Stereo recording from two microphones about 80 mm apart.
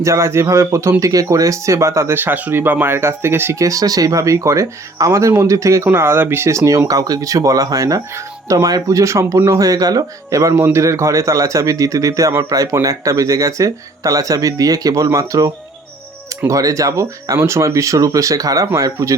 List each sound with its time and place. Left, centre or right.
0.0 s speech: right
2.1 s speech: right
3.6 s speech: right
5.9 s speech: right
6.8 s speech: right